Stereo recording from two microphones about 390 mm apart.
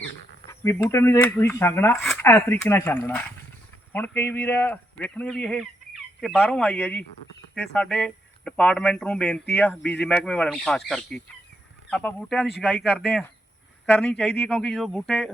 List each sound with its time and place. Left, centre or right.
0.6 s speech: centre